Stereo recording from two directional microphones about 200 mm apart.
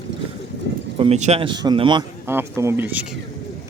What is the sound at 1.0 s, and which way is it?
Speech, 35° right (ahead or behind).